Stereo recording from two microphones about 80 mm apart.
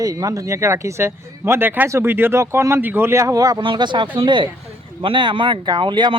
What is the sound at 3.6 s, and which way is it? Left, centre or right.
Speech, right.